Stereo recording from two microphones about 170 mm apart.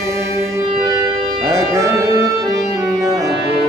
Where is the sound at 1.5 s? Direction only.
20° right (ahead or behind).